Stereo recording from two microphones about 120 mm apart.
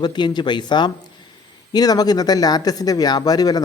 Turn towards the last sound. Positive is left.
turn(degrees=30)  # may be behind; listen again after turning